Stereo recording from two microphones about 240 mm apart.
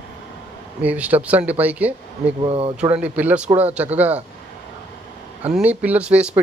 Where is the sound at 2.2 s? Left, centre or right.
Right.